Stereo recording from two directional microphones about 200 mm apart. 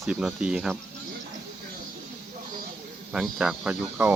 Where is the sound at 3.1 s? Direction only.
5° right (ahead or behind).